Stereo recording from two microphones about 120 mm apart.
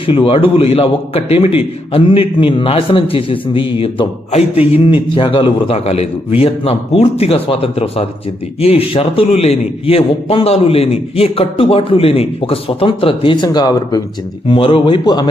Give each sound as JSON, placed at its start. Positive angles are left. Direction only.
{"t": 0.1, "sound": "a man's voice", "side_deg": 50}
{"t": 14.4, "sound": "a man's voice", "side_deg": 50}